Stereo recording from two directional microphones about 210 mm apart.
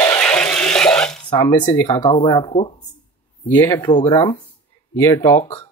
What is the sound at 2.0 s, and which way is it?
Speech, 20° left (ahead or behind).